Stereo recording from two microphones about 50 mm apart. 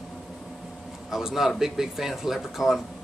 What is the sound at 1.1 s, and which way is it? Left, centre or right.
A man's voice, centre.